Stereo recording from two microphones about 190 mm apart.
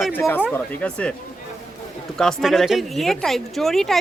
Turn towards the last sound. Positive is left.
turn(degrees=0)  # may be behind; listen again after turning